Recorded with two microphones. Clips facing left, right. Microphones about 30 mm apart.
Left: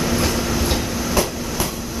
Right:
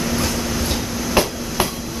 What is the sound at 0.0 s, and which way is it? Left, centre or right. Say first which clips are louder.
Train: left 1 dB; centre.